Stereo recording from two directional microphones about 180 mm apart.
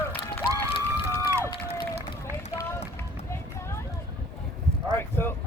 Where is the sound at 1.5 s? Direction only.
25° left (ahead or behind).